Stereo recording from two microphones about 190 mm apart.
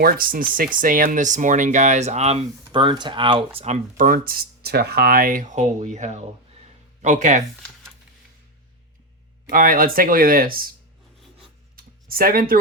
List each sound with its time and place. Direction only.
0.0 s speech: 50° right (ahead or behind)
2.7 s speech: 25° right (ahead or behind); by 7.4 s 40° right (ahead or behind)
9.5 s speech: 45° right (ahead or behind)
12.0 s speech: 50° right (ahead or behind)